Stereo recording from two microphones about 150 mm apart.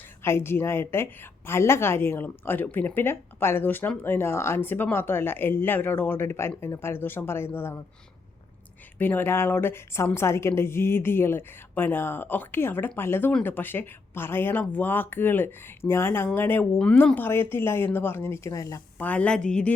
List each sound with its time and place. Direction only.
0.2 s a woman's voice: 15° left (ahead or behind)
9.0 s a woman's voice: 15° left (ahead or behind)
19.0 s a woman's voice: 10° left (ahead or behind)